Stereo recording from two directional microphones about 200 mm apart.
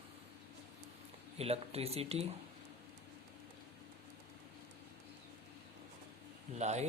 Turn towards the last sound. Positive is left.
turn(degrees=-35)  # may be behind; listen again after turning